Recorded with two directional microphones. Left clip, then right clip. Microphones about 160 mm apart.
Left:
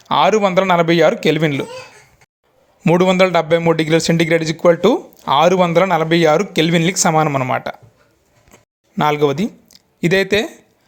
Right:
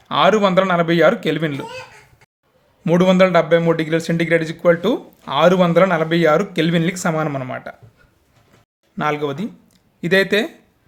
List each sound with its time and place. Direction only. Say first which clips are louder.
0.0 s speech: left 1 dB; 20° left (ahead or behind)
2.8 s a man's voice: left 1 dB; 30° left (ahead or behind)
9.0 s speech: left 6 dB; 30° left (ahead or behind)